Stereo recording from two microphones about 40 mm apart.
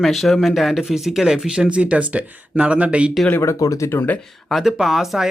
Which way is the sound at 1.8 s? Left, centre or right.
Right.